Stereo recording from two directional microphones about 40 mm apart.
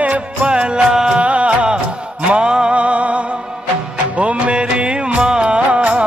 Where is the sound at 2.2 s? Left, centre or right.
Right.